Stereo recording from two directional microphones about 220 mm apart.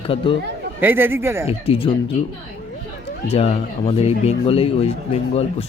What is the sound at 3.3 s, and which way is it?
Speech, 25° left (ahead or behind).